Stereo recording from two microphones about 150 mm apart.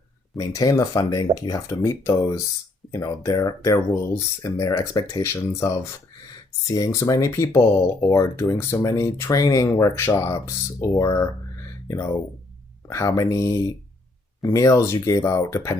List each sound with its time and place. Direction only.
0.3 s speech: 25° left (ahead or behind)